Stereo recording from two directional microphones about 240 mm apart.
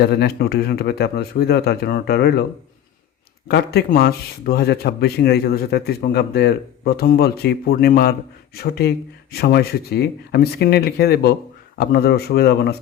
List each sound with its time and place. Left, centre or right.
0.0 s speech: left
3.5 s speech: left